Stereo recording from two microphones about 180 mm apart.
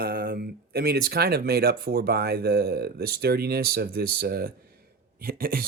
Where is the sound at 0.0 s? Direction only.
60° right (ahead or behind).